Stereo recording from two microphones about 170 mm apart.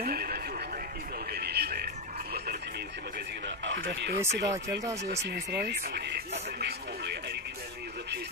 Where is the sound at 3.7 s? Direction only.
90° right.